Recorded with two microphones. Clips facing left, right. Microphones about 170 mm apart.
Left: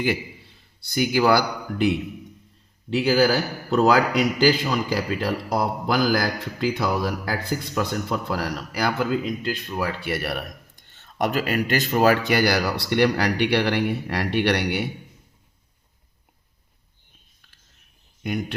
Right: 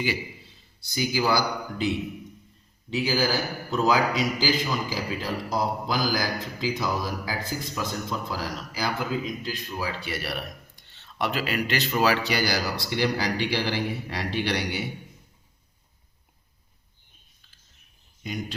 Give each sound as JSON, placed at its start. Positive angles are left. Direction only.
{"t": 0.0, "sound": "a man's voice", "side_deg": 55}
{"t": 2.9, "sound": "a man's voice", "side_deg": 65}
{"t": 18.2, "sound": "speech", "side_deg": 60}